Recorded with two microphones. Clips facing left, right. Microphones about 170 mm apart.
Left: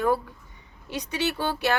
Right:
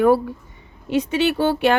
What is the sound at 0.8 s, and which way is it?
Speech, 15° right (ahead or behind).